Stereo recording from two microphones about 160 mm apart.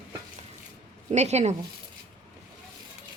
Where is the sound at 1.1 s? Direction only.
45° right (ahead or behind).